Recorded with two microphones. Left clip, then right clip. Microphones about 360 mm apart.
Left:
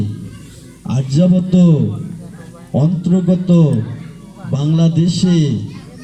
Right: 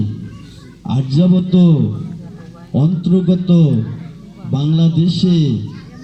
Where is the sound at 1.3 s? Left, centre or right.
Centre.